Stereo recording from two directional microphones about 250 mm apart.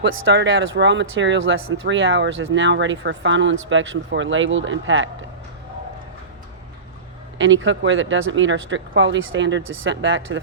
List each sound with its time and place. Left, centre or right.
0.0 s speech: right
7.3 s speech: right